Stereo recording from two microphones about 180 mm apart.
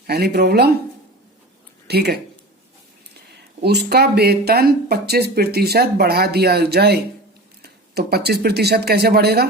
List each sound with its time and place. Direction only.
0.1 s speech: 60° right (ahead or behind)
1.9 s speech: 65° right (ahead or behind)
3.6 s speech: 65° right (ahead or behind)